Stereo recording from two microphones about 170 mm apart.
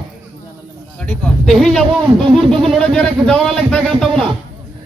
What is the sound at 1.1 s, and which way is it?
Speech, 5° left (ahead or behind).